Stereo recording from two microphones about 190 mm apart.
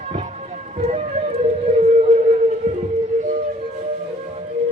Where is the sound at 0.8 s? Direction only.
35° right (ahead or behind).